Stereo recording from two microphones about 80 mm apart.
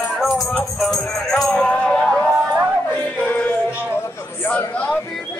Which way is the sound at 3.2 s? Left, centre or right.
Left.